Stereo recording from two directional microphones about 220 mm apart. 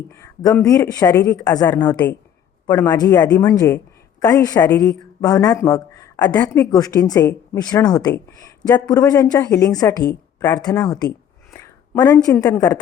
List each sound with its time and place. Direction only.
0.1 s speech: 15° left (ahead or behind)
0.9 s speech: 15° left (ahead or behind)
5.3 s speech: 15° left (ahead or behind)
6.3 s speech: 5° left (ahead or behind)
6.7 s a woman's voice: 15° left (ahead or behind)
11.5 s a sound: 15° left (ahead or behind)
12.3 s speech: 5° left (ahead or behind)